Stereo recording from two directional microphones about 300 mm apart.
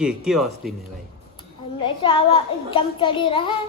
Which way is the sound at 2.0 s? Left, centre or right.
Centre.